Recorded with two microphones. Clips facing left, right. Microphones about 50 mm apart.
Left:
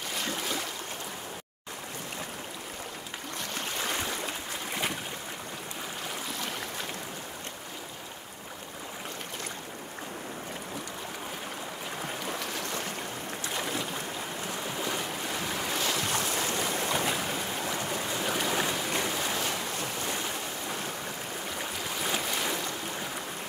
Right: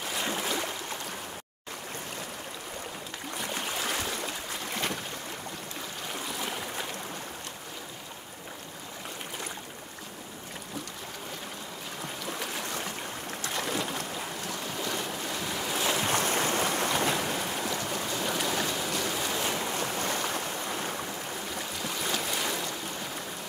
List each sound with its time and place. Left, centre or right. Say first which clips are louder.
0.2 s boat: right 2 dB; centre
3.3 s stream: right 2 dB; centre
12.4 s stream: even; centre
14.5 s waves: left 1 dB; centre
15.8 s boat: right 4 dB; right
16.2 s boat: right 3 dB; right
16.9 s boat: right 1 dB; centre
17.6 s stream: even; left
18.9 s a sound: left 1 dB; left
19.4 s boat: right 2 dB; centre
19.8 s waves: right 3 dB; right
21.5 s boat: left 1 dB; centre